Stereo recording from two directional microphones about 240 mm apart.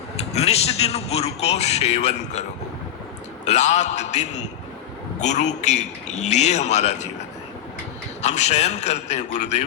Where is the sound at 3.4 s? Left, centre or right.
Left.